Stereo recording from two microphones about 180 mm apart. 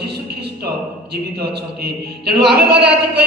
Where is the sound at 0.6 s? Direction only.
65° right (ahead or behind).